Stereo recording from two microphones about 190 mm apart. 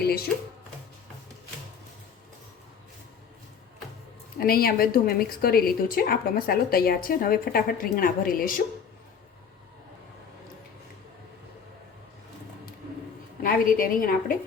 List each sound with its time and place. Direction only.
0.0 s a sound: 55° left (ahead or behind)
4.4 s a woman's voice: 50° left (ahead or behind)
13.4 s a woman's voice: 50° left (ahead or behind)